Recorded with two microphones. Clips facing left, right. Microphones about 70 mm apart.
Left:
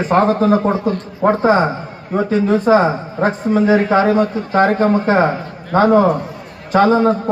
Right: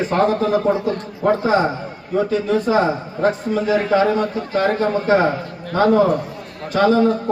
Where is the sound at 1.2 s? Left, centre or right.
Left.